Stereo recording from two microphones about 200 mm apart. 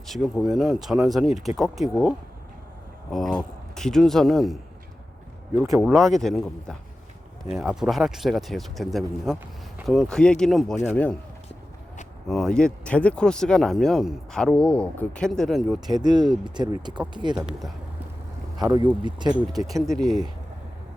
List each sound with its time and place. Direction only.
0.4 s a man's voice: centre (ahead or behind)
5.8 s speech: centre (ahead or behind)
12.3 s speech: 5° left (ahead or behind)
15.9 s speech: 20° right (ahead or behind)
17.3 s speech: 5° right (ahead or behind)
18.5 s speech: 20° right (ahead or behind)
19.5 s speech: centre (ahead or behind)